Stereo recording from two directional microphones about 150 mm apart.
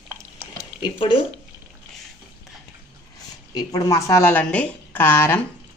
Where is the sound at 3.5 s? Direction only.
25° left (ahead or behind).